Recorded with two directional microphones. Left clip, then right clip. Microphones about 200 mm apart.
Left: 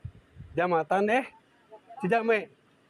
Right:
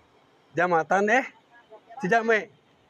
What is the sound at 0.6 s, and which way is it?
Speech, 5° left (ahead or behind).